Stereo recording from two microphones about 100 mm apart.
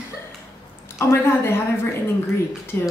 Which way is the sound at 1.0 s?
25° left (ahead or behind).